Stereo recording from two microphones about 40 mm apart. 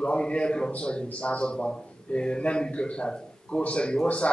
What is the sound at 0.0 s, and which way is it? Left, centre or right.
A man's voice, left.